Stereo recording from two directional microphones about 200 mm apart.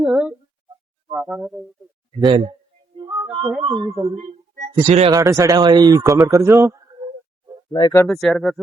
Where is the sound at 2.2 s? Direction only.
25° right (ahead or behind).